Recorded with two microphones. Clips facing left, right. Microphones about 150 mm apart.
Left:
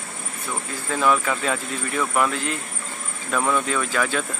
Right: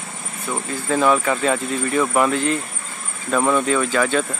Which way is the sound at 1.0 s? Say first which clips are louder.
Right 3 dB; 5° right (ahead or behind).